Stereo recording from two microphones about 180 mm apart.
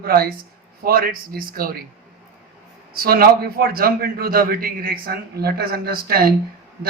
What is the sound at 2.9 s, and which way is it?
A man's voice, 55° right (ahead or behind).